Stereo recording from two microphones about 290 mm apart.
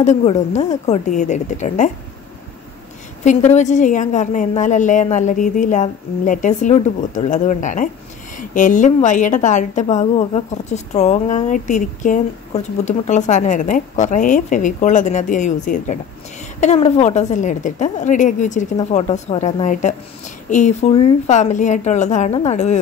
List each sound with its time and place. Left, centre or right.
0.0 s a woman's voice: left
3.3 s a woman's voice: left